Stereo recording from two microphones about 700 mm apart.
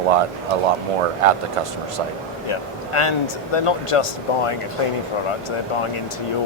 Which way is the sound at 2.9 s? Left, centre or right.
Left.